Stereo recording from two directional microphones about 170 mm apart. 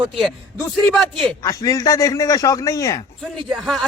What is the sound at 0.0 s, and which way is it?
Speech, centre (ahead or behind).